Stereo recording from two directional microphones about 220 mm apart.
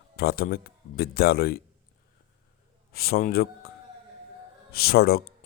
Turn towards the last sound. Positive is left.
turn(degrees=45)  # may be behind; listen again after turning